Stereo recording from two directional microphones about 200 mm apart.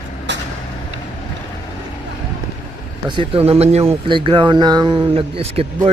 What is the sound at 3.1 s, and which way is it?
Speech, 25° right (ahead or behind).